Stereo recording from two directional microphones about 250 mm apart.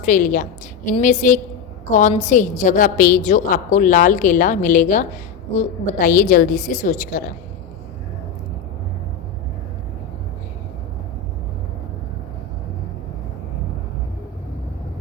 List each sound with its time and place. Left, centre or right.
0.0 s a woman's voice: left